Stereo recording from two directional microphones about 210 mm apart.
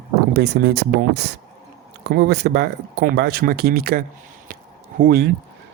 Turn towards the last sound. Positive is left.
turn(degrees=-45)  # may be behind; listen again after turning